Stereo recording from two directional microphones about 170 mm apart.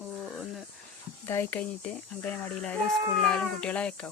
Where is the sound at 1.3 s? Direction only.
10° left (ahead or behind).